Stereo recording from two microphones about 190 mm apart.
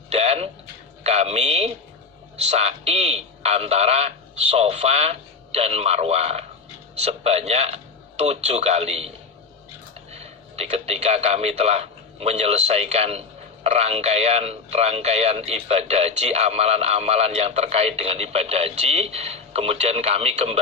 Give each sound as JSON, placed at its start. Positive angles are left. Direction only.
{"t": 0.1, "sound": "a sound", "side_deg": -35}
{"t": 2.3, "sound": "speech", "side_deg": -35}
{"t": 10.1, "sound": "a man's voice", "side_deg": -35}